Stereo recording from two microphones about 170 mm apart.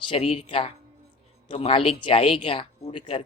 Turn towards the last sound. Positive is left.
turn(degrees=30)  # may be behind; listen again after turning